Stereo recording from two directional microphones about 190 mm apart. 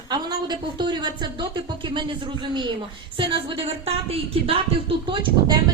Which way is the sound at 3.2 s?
25° right (ahead or behind).